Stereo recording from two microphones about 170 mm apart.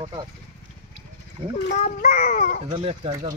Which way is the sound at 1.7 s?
45° left (ahead or behind).